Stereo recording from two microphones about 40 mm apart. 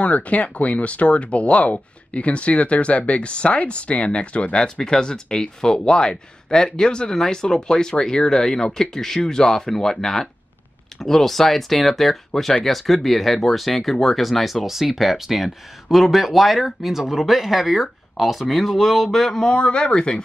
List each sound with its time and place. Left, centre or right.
0.0 s speech: left
4.6 s speech: centre
19.5 s speech: left